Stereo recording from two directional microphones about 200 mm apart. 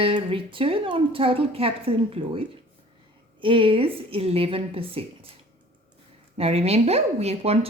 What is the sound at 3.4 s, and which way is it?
A woman's voice, 25° right (ahead or behind).